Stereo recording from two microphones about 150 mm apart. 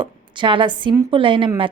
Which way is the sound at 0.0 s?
35° right (ahead or behind).